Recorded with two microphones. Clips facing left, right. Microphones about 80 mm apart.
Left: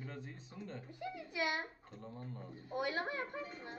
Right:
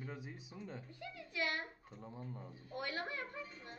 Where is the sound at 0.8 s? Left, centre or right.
Centre.